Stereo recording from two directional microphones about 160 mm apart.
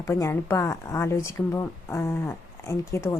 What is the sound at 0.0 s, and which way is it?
Speech, 20° left (ahead or behind).